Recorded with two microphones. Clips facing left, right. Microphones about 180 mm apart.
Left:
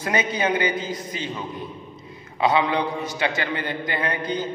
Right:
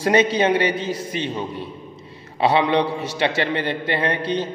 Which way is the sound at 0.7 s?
75° right (ahead or behind).